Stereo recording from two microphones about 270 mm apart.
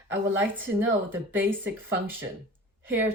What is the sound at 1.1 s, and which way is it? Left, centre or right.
Speech, centre.